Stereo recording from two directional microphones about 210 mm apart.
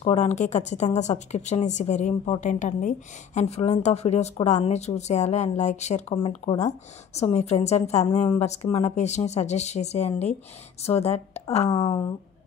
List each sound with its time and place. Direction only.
0.0 s speech: 30° left (ahead or behind)
11.7 s speech: 15° left (ahead or behind)